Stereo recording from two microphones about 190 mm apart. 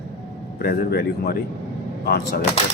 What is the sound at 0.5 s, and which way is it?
Speech, 55° left (ahead or behind).